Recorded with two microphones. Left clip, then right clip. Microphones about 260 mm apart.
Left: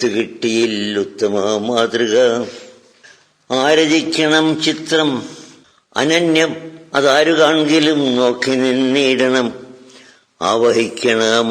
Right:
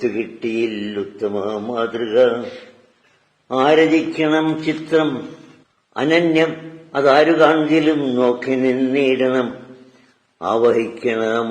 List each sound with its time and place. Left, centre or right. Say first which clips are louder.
0.2 s speech: left 5 dB; left
3.5 s speech: left 1 dB; left
5.9 s a man's voice: left 2 dB; left